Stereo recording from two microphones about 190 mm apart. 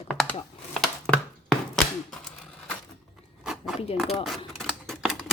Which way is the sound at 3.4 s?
Centre (ahead or behind).